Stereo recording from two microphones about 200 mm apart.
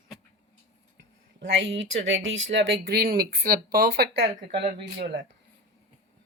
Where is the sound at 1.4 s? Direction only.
65° right (ahead or behind).